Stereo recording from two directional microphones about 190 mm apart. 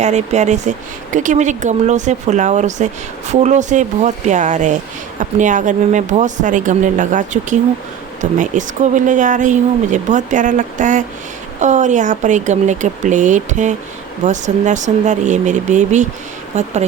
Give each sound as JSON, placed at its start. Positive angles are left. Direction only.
{"t": 0.0, "sound": "speech", "side_deg": -35}